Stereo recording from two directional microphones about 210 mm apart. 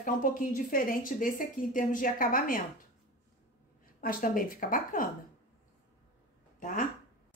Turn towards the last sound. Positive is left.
turn(degrees=40)  # may be behind; listen again after turning